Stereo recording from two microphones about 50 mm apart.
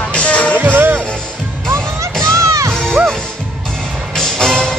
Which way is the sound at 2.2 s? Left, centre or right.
Right.